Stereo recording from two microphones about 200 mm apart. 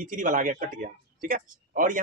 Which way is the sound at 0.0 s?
40° right (ahead or behind).